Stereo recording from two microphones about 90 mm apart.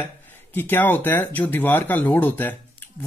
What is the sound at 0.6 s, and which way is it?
Speech, 25° left (ahead or behind).